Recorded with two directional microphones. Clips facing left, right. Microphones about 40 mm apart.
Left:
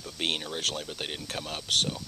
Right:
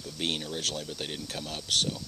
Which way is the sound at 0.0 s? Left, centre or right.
Left.